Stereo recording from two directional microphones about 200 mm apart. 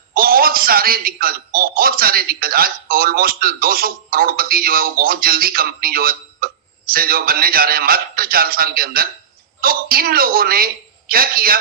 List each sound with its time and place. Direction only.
0.1 s a man's voice: 45° right (ahead or behind)